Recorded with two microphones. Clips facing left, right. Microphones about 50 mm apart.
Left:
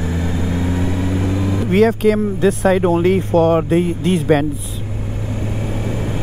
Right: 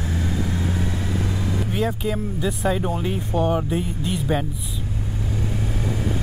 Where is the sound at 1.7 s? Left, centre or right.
Left.